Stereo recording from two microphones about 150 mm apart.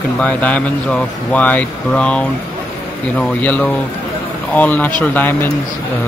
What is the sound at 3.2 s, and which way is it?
Speech, 10° left (ahead or behind).